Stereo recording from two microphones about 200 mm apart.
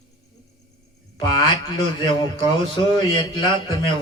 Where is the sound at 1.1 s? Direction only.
20° left (ahead or behind).